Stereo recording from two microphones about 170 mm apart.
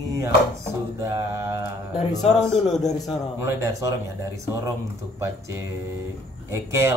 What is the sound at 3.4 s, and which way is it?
Speech, 20° right (ahead or behind).